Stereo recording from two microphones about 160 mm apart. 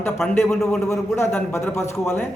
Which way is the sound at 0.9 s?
15° left (ahead or behind).